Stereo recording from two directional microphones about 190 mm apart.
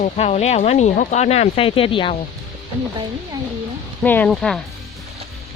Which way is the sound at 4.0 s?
10° left (ahead or behind).